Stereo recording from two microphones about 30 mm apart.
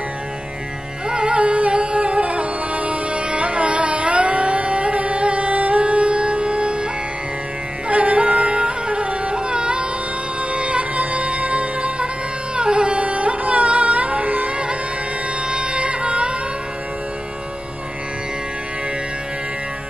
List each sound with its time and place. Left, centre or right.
1.0 s music: right
7.9 s music: right
10.5 s music: right
12.5 s carnatic music: right
15.4 s music: right